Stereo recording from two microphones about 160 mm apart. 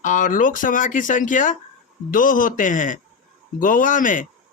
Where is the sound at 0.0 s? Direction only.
55° left (ahead or behind).